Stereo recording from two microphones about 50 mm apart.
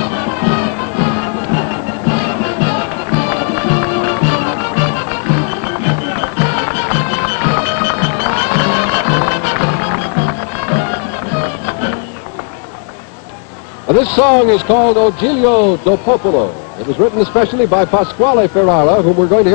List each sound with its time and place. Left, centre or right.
0.0 s music: centre
13.8 s a man's voice: centre
17.3 s speech: centre